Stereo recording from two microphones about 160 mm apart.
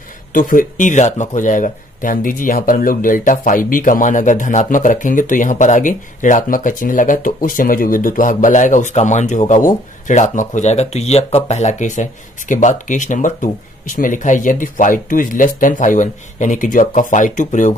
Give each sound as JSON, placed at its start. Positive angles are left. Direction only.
{"t": 0.3, "sound": "speech", "side_deg": 55}